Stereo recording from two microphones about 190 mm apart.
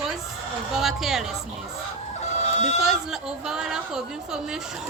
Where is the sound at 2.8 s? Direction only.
Centre (ahead or behind).